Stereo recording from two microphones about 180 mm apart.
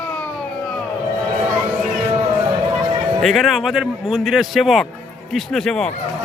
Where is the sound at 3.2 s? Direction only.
Centre (ahead or behind).